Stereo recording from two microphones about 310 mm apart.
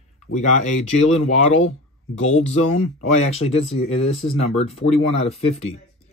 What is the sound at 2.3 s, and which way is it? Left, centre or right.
Speech, left.